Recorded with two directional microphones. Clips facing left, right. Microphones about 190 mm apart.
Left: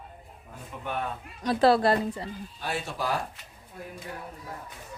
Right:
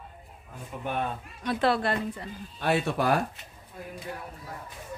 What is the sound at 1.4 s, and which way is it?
Speech, 35° left (ahead or behind).